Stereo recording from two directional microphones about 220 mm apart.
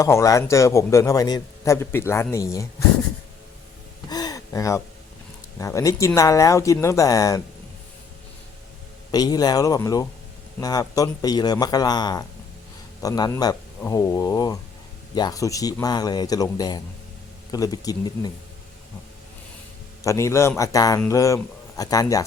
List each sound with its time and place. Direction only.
0.0 s a man's voice: 15° left (ahead or behind)
4.1 s gasp: 15° left (ahead or behind)
5.5 s a man's voice: 15° left (ahead or behind)
9.1 s a man's voice: 15° left (ahead or behind)
20.1 s a man's voice: 15° left (ahead or behind)